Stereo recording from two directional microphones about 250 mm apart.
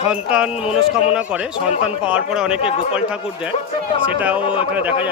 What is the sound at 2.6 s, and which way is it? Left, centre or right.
Speech, left.